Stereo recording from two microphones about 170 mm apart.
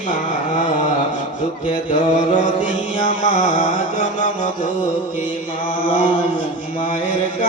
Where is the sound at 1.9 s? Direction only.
45° left (ahead or behind).